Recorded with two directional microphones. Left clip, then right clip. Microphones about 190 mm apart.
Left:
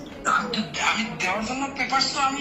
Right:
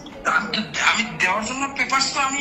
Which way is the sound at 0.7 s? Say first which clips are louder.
Right 5 dB; 35° right (ahead or behind).